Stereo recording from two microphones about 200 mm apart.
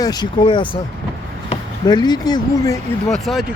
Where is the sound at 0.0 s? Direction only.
20° left (ahead or behind).